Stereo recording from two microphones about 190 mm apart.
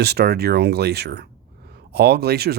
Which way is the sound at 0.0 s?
60° right (ahead or behind).